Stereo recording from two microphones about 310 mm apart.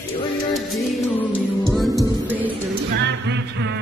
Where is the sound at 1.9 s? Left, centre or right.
Centre.